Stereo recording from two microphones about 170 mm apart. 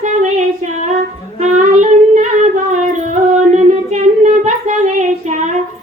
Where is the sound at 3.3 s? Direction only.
45° right (ahead or behind).